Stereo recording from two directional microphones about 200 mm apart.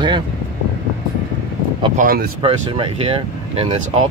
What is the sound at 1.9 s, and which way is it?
Speech, 45° right (ahead or behind).